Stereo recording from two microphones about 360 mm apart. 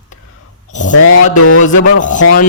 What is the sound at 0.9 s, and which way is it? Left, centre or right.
Mantra, left.